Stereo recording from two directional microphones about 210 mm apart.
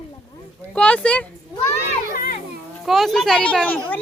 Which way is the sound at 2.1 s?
45° left (ahead or behind).